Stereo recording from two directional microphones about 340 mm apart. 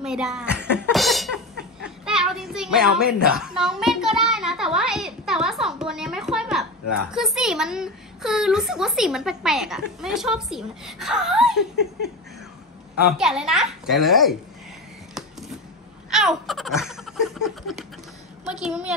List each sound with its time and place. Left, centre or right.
0.0 s speech: centre
0.9 s a sound: centre
1.6 s a child's voice: centre
13.2 s a woman's voice: centre
16.1 s laughter: centre
18.5 s a woman's voice: centre